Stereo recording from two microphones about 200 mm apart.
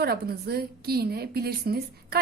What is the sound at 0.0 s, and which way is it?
A woman's voice, 50° right (ahead or behind).